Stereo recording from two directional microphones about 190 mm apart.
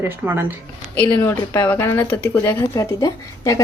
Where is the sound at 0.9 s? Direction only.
10° left (ahead or behind).